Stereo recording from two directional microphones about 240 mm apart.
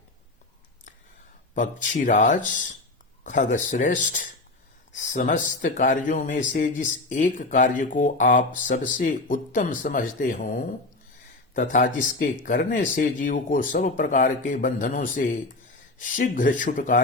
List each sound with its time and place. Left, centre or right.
1.5 s speech: left